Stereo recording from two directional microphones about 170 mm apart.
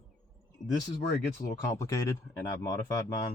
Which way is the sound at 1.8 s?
20° left (ahead or behind).